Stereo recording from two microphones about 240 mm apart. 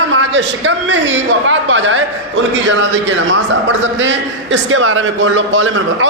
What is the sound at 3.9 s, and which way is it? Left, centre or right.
A man's voice, right.